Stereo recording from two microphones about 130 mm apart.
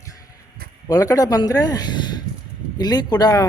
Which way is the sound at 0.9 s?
30° left (ahead or behind).